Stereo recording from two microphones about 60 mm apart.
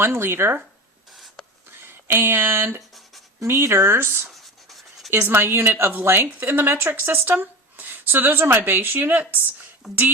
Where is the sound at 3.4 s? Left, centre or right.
Right.